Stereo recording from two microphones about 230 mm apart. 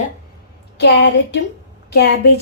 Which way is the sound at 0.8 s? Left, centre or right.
Left.